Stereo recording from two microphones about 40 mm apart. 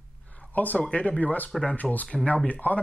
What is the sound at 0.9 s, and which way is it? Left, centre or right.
Speech, left.